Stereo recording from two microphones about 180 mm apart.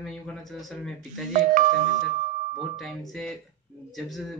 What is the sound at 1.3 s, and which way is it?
Speech, 45° right (ahead or behind).